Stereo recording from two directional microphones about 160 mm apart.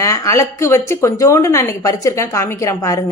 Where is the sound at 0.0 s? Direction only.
20° left (ahead or behind).